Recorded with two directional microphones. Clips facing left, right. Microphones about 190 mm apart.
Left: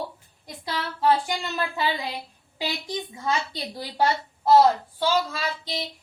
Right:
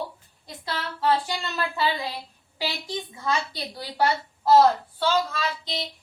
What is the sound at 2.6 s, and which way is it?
Speech, 15° left (ahead or behind).